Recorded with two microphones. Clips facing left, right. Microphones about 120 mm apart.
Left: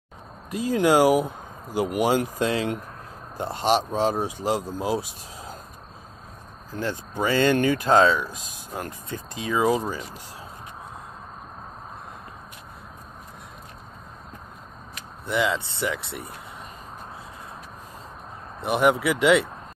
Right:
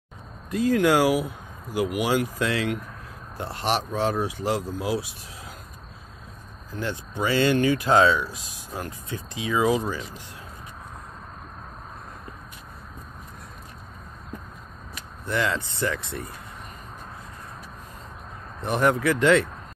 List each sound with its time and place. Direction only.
0.6 s speech: 15° left (ahead or behind)
1.8 s speech: 45° left (ahead or behind)
2.3 s speech: 30° left (ahead or behind)
3.3 s speech: 20° left (ahead or behind)
4.7 s speech: 45° left (ahead or behind)
6.7 s speech: 40° left (ahead or behind)
15.2 s speech: 20° left (ahead or behind)
18.6 s speech: 10° left (ahead or behind)